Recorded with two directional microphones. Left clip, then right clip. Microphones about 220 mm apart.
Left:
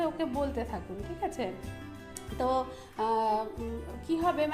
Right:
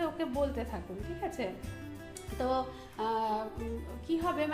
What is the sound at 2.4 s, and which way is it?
Speech, 30° left (ahead or behind).